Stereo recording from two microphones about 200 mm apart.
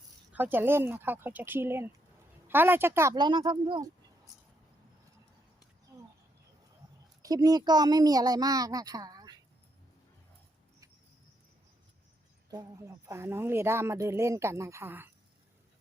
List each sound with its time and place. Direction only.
0.3 s speech: 10° right (ahead or behind)
7.2 s speech: 20° right (ahead or behind)
12.5 s speech: 15° right (ahead or behind)